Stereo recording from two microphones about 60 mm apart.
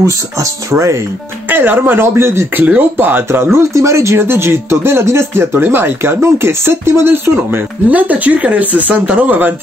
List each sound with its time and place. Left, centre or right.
0.0 s speech: right
1.5 s speech: right
2.5 s speech: right
3.3 s speech: right
3.7 s speech: right
7.9 s speech: right